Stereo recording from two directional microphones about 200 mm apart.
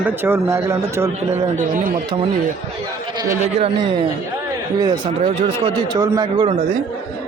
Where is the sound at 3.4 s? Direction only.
30° right (ahead or behind).